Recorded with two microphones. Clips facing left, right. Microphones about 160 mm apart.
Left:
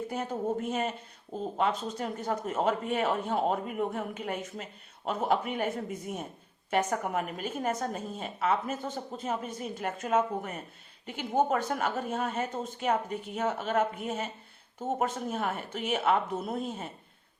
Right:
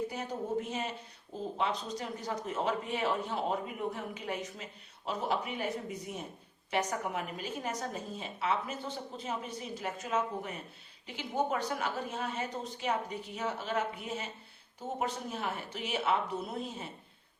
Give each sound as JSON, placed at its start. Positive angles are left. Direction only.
{"t": 0.7, "sound": "a woman's voice", "side_deg": 55}